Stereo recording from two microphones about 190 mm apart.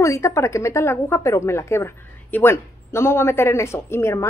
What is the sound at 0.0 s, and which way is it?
A woman's voice, 15° left (ahead or behind).